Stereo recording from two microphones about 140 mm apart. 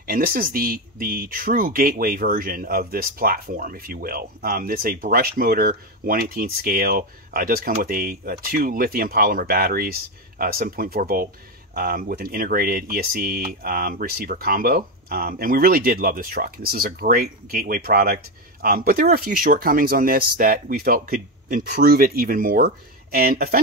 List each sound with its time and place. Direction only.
0.0 s speech: 90° right